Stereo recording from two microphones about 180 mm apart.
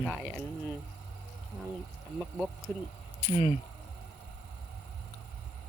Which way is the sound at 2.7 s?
10° left (ahead or behind).